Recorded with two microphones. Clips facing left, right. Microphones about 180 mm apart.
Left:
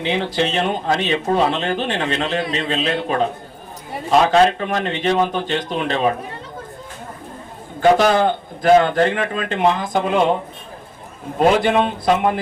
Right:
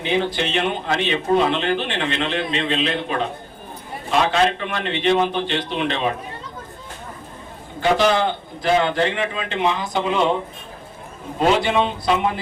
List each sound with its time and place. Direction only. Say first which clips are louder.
0.3 s a man's voice: left 3 dB; 40° left (ahead or behind)
7.8 s a man's voice: left 4 dB; 45° left (ahead or behind)
11.3 s a man's voice: left 3 dB; 50° left (ahead or behind)